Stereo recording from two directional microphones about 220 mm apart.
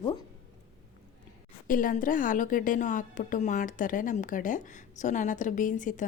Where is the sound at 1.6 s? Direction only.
40° left (ahead or behind).